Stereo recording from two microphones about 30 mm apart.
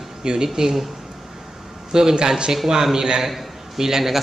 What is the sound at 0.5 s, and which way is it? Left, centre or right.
Speech, centre.